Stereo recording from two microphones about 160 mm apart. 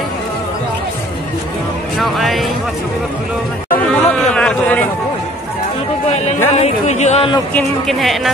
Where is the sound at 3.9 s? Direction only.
5° left (ahead or behind).